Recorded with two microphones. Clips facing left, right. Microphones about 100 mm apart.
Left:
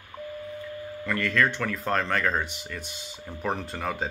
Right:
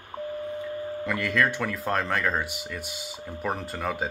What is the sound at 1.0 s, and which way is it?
Speech, 10° right (ahead or behind).